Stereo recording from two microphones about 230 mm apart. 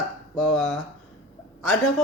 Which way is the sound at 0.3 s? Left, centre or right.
Centre.